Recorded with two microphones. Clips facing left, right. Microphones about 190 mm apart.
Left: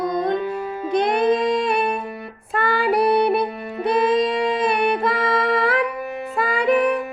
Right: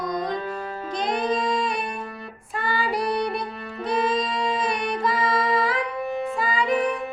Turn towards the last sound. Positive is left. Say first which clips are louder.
# left 5 dB
turn(degrees=60)  # may be behind; listen again after turning